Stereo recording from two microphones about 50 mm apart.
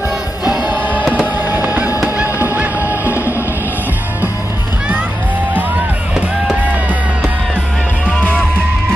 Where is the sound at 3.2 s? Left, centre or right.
Left.